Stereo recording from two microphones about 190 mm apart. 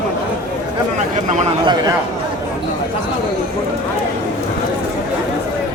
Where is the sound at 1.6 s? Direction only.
20° right (ahead or behind).